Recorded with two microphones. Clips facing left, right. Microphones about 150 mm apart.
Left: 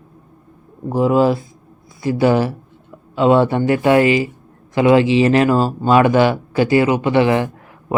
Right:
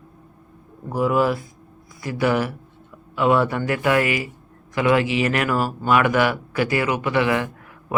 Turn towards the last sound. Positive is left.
turn(degrees=30)  # may be behind; listen again after turning